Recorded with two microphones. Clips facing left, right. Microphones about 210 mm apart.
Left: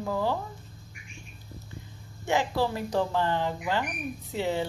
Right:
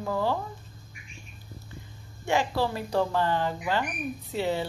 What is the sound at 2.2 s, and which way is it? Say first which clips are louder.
A woman's voice: even; 15° left (ahead or behind).